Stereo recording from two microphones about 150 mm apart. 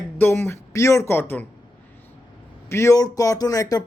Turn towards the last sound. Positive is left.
turn(degrees=20)  # may be behind; listen again after turning